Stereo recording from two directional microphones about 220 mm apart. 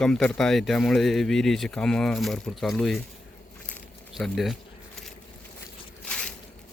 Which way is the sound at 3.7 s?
Centre (ahead or behind).